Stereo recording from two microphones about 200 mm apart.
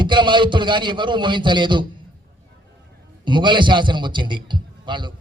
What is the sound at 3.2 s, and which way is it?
A man's voice, 25° right (ahead or behind).